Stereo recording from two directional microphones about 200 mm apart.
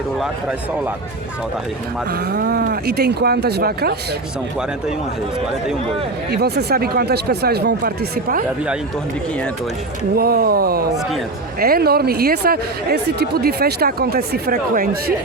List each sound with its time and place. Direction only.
2.3 s speech: 50° right (ahead or behind)
6.3 s speech: 55° right (ahead or behind)
10.2 s speech: 50° right (ahead or behind)